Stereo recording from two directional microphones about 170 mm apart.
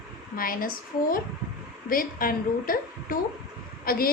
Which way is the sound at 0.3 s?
55° left (ahead or behind).